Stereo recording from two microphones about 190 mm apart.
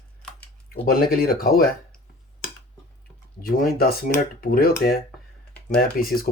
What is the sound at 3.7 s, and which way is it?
Speech, 50° left (ahead or behind).